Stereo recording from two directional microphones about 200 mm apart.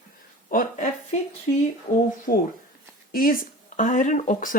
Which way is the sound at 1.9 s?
45° left (ahead or behind).